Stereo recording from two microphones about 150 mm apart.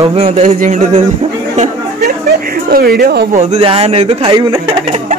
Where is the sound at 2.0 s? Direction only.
90° right.